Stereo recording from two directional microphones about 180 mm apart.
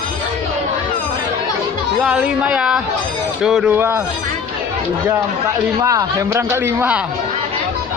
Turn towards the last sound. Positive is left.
turn(degrees=-10)  # may be behind; listen again after turning